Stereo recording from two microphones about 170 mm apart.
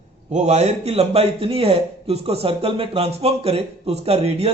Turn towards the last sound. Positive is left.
turn(degrees=-35)  # may be behind; listen again after turning